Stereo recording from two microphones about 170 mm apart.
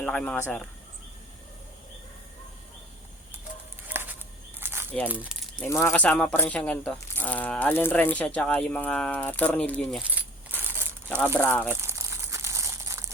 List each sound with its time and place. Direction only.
0.0 s speech: 5° left (ahead or behind)
3.8 s a sound: 10° right (ahead or behind)
5.0 s speech: 10° right (ahead or behind)
5.5 s speech: 15° left (ahead or behind)
10.2 s a sound: 10° right (ahead or behind)
11.3 s speech: 10° left (ahead or behind)
11.7 s crumpling: 15° right (ahead or behind)